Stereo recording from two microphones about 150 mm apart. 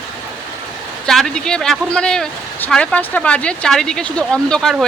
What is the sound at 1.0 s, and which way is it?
Speech, 5° left (ahead or behind).